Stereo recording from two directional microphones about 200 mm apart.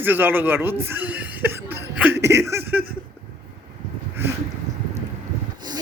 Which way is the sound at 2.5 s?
10° right (ahead or behind).